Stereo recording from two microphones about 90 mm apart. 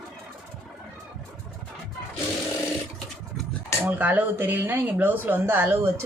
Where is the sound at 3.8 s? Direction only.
20° right (ahead or behind).